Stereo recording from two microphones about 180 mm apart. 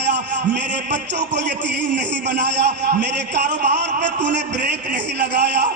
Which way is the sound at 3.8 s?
75° right (ahead or behind).